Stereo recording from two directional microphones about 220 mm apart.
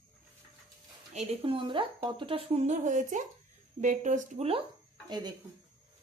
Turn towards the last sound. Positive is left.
turn(degrees=-20)  # may be behind; listen again after turning